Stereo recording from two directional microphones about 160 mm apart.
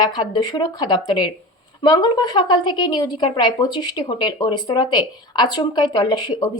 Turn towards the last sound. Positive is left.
turn(degrees=25)  # may be behind; listen again after turning